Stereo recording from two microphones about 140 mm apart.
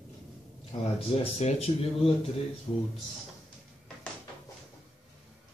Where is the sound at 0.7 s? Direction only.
45° left (ahead or behind).